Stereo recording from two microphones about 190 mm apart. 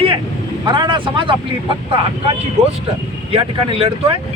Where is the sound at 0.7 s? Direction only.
25° right (ahead or behind).